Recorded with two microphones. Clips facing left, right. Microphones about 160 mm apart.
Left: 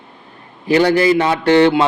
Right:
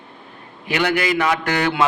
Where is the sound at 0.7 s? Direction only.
35° left (ahead or behind).